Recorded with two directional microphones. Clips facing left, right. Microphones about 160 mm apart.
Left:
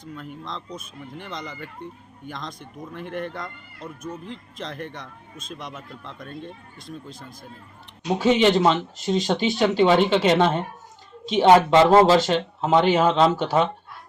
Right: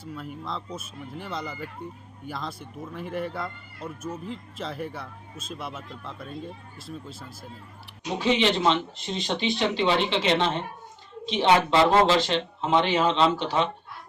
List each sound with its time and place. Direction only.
0.0 s speech: 5° right (ahead or behind)
8.2 s speech: 45° left (ahead or behind)